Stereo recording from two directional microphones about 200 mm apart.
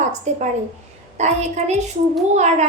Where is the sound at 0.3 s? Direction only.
35° right (ahead or behind).